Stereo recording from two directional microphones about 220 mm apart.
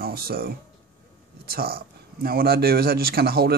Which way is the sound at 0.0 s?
45° right (ahead or behind).